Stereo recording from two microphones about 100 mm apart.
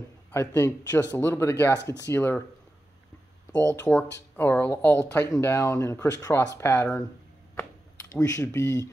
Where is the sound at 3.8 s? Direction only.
15° left (ahead or behind).